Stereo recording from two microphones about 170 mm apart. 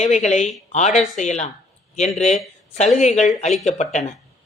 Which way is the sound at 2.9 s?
45° left (ahead or behind).